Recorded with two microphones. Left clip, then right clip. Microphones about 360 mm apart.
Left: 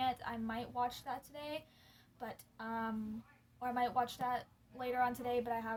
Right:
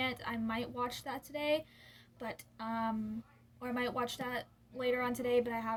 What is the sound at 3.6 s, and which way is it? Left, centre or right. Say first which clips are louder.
A woman's voice: left 1 dB; centre.